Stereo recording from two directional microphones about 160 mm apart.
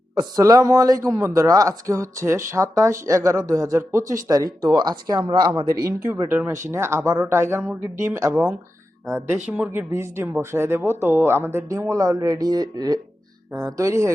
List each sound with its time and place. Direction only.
0.1 s speech: 25° right (ahead or behind)